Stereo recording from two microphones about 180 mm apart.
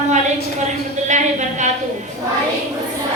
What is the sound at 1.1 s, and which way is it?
Speech, 40° right (ahead or behind).